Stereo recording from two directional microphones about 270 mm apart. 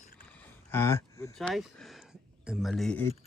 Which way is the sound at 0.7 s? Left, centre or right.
Centre.